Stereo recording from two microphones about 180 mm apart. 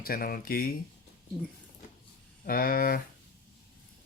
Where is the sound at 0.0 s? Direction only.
55° left (ahead or behind).